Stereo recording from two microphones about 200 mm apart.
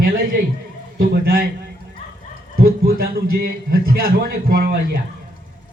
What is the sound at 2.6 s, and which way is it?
A man's voice, 50° right (ahead or behind).